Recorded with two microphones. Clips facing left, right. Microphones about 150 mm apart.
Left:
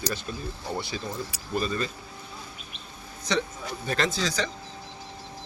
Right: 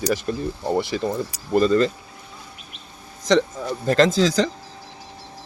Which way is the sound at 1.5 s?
85° right.